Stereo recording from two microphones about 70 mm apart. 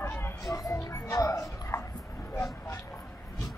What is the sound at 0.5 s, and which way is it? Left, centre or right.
Music, left.